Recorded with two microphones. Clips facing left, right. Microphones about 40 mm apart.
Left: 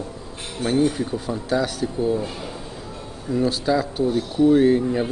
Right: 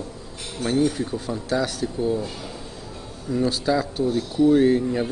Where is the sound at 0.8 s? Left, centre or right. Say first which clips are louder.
Left 2 dB; centre.